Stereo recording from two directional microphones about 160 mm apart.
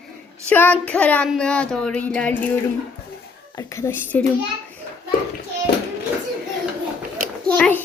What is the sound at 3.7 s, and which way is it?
Speech, 15° left (ahead or behind).